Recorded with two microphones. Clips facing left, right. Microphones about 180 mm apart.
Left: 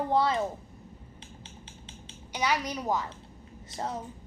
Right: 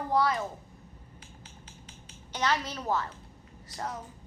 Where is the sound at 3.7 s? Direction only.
25° left (ahead or behind).